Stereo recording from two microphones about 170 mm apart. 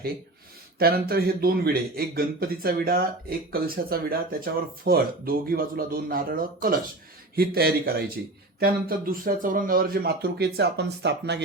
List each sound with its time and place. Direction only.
0.8 s speech: 65° right (ahead or behind); by 11.4 s 85° right